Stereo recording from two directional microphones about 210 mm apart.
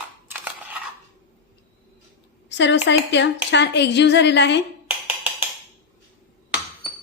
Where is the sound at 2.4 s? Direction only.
60° left (ahead or behind).